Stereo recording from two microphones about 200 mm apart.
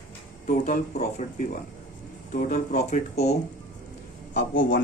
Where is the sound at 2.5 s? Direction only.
40° left (ahead or behind).